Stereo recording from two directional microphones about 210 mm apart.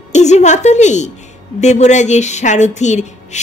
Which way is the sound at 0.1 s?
35° left (ahead or behind).